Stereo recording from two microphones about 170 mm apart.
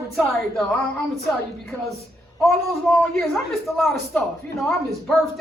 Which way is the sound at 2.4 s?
Centre (ahead or behind).